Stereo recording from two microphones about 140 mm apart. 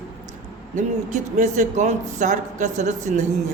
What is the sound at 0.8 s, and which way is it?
Speech, 60° right (ahead or behind).